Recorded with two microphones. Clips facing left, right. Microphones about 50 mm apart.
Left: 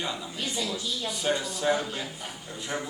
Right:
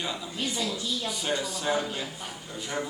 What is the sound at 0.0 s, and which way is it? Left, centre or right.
Speech, centre.